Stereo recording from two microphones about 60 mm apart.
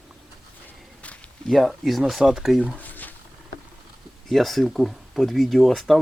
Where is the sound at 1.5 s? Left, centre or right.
Centre.